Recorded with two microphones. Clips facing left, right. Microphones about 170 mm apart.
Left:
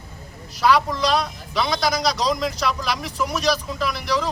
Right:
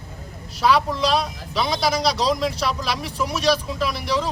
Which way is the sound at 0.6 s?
5° right (ahead or behind).